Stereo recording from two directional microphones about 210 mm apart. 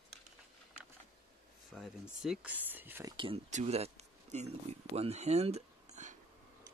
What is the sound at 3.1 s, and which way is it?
Speech, 25° right (ahead or behind).